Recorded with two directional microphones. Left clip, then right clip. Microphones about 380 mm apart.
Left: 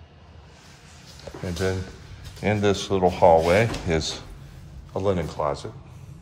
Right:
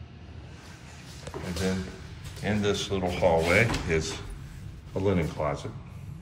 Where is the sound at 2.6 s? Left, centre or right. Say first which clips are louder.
Left 7 dB; centre.